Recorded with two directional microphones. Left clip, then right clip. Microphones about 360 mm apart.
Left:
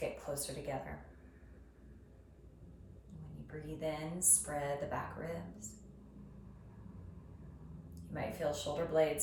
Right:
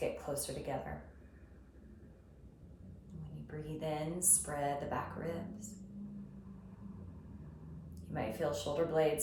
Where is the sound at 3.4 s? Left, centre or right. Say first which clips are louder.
Left 1 dB; centre.